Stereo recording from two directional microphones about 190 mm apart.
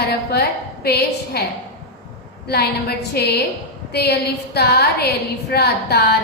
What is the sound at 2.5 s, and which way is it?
A woman's voice, 55° left (ahead or behind).